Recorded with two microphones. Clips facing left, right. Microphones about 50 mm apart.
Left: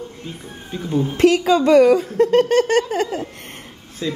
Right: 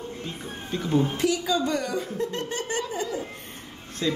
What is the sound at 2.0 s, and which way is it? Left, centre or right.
Laughter, left.